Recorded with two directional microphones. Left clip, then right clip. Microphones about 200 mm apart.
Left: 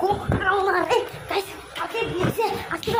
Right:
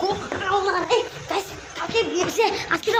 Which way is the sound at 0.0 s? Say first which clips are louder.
Left 2 dB; centre (ahead or behind).